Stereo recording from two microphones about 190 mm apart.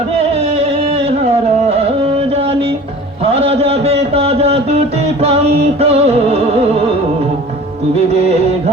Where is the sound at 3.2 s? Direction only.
30° right (ahead or behind).